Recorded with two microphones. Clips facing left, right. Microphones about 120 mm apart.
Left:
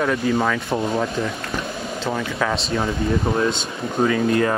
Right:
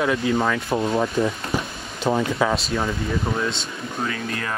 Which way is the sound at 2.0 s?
15° right (ahead or behind).